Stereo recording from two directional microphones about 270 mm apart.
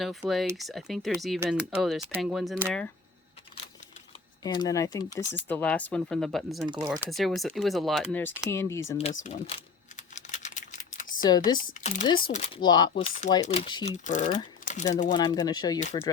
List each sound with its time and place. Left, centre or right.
0.0 s speech: centre
4.4 s speech: centre
6.8 s speech: centre
7.1 s speech: centre
9.0 s speech: left
10.2 s typing: left
11.2 s speech: centre
11.5 s speech: left
15.1 s speech: centre
15.8 s speech: left